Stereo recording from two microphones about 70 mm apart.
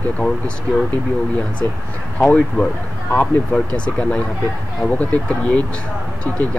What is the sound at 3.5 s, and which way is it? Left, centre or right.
Speech, centre.